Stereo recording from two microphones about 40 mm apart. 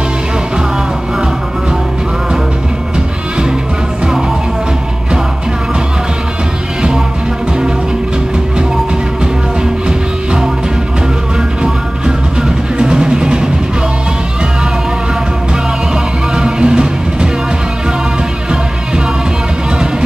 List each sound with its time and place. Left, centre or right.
9.8 s music: centre
12.4 s music: right
16.3 s music: right